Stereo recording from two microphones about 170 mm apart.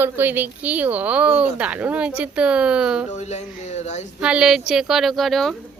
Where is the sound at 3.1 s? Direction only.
45° left (ahead or behind).